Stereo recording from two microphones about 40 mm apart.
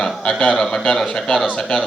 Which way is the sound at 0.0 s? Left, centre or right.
Left.